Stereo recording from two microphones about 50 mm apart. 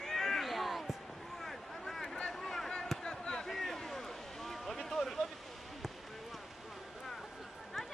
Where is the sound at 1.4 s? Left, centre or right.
Centre.